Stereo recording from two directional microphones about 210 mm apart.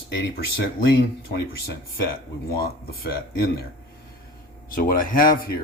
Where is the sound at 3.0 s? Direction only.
50° left (ahead or behind).